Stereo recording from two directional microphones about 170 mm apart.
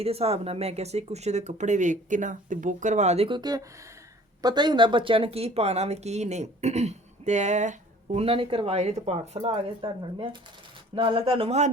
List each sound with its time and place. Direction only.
0.0 s speech: 35° right (ahead or behind)